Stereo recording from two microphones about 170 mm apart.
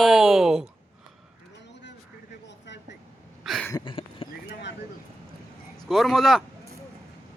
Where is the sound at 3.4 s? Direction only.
Centre (ahead or behind).